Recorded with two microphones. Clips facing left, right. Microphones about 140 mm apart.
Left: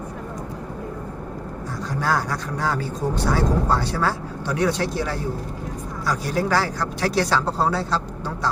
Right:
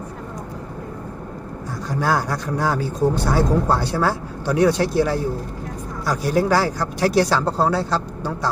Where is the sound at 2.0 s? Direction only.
10° right (ahead or behind).